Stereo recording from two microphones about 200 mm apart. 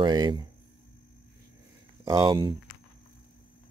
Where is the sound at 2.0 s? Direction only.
20° right (ahead or behind).